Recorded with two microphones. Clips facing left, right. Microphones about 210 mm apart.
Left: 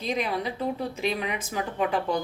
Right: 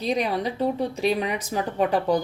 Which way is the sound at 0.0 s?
35° right (ahead or behind).